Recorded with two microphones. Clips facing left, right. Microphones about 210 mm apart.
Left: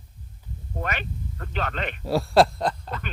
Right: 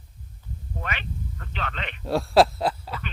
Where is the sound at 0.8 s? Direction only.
45° left (ahead or behind).